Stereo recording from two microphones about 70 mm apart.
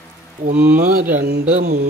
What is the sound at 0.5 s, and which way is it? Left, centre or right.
Speech, right.